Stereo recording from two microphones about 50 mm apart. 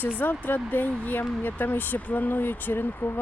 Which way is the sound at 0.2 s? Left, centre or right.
Left.